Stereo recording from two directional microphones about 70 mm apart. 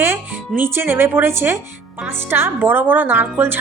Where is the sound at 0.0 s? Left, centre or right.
Right.